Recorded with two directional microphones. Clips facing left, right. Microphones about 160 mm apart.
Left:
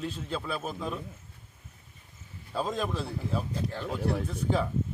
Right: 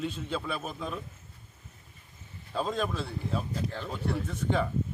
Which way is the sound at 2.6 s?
5° left (ahead or behind).